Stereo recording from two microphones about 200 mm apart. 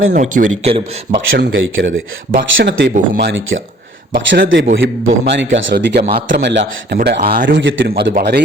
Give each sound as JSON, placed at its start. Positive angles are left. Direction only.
{"t": 0.1, "sound": "speech", "side_deg": -40}
{"t": 1.5, "sound": "speech", "side_deg": -80}
{"t": 2.4, "sound": "a man's voice", "side_deg": -60}
{"t": 7.6, "sound": "a man's voice", "side_deg": -70}
{"t": 7.9, "sound": "a man's voice", "side_deg": -50}